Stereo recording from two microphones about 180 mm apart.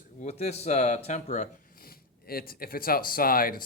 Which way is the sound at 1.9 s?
55° left (ahead or behind).